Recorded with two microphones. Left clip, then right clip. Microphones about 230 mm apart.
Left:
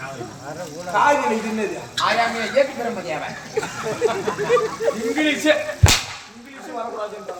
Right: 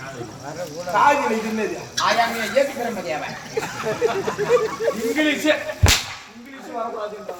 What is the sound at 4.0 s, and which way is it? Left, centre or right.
Speech, left.